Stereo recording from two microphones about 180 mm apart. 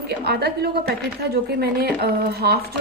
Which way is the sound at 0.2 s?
60° right (ahead or behind).